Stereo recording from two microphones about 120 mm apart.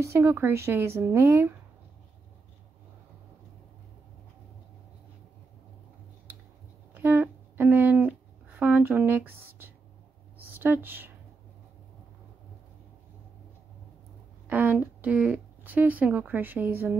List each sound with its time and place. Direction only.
0.0 s speech: 25° right (ahead or behind)
6.9 s a sound: 15° right (ahead or behind)
10.5 s speech: 15° right (ahead or behind)
14.5 s speech: 15° right (ahead or behind)